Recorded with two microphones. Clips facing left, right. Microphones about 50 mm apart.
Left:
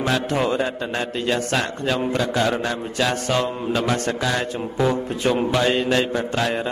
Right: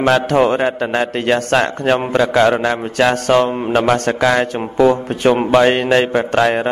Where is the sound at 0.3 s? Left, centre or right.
Right.